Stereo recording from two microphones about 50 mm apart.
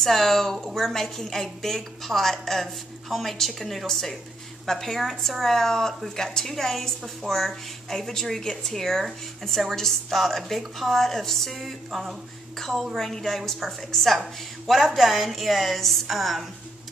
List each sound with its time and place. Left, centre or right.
0.0 s a woman's voice: centre